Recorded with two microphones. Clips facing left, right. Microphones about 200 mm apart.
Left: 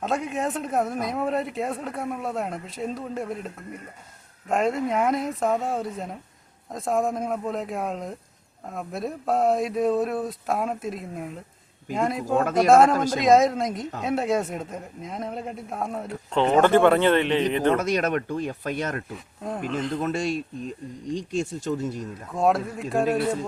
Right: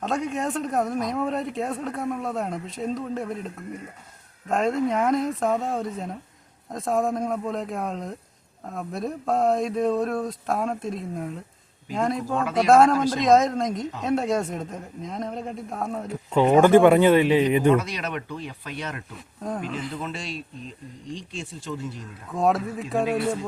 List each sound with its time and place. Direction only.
0.0 s a man's voice: centre (ahead or behind)
12.4 s speech: 45° left (ahead or behind)
12.6 s a man's voice: centre (ahead or behind)
17.7 s speech: 45° left (ahead or behind)
19.1 s a man's voice: 5° left (ahead or behind)
20.0 s speech: 50° left (ahead or behind)
22.4 s a man's voice: centre (ahead or behind)